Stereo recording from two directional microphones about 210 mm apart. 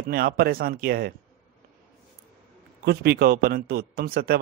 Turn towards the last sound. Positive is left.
turn(degrees=-45)  # may be behind; listen again after turning